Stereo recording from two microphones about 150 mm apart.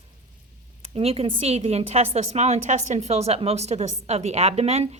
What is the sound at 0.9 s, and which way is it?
A woman's voice, 40° right (ahead or behind).